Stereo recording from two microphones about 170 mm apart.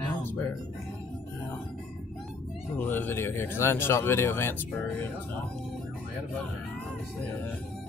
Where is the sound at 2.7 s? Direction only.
10° left (ahead or behind).